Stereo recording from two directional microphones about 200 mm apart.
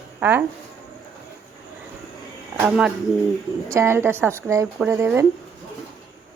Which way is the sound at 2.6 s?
5° right (ahead or behind).